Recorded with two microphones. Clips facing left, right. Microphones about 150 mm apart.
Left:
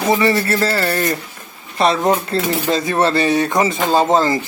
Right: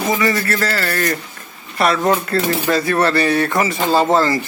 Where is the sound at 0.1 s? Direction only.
25° left (ahead or behind).